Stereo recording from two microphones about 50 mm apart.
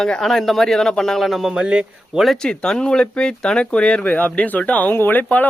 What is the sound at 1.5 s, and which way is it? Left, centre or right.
Speech, centre.